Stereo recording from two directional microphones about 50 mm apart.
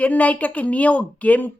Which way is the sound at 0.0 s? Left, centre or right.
Left.